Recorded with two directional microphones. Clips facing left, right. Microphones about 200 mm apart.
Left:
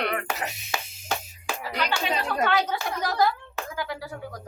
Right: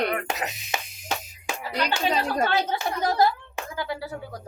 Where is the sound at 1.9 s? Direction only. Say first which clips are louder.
Right 4 dB; 30° right (ahead or behind).